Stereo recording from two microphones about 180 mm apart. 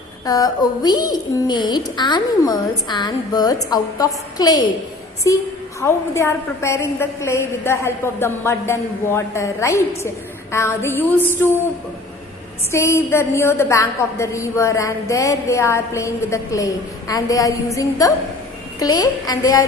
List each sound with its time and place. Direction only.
0.3 s a woman's voice: 20° left (ahead or behind)
12.7 s a woman's voice: 15° left (ahead or behind)